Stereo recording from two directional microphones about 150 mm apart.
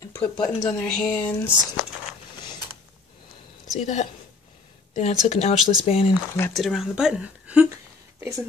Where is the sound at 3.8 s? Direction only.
50° left (ahead or behind).